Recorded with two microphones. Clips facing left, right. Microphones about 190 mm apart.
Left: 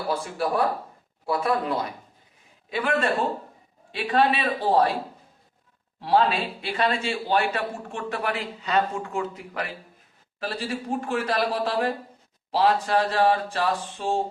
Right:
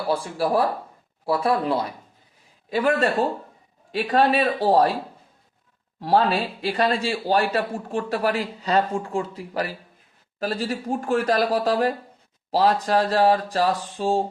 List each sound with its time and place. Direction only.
0.1 s a man's voice: 30° right (ahead or behind)
2.6 s a man's voice: 40° right (ahead or behind)
6.0 s a man's voice: 40° right (ahead or behind)